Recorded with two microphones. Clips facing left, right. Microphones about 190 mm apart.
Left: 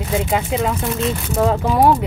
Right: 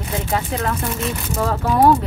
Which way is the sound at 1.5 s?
15° left (ahead or behind).